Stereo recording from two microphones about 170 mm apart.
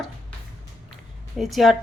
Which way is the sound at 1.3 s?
Centre (ahead or behind).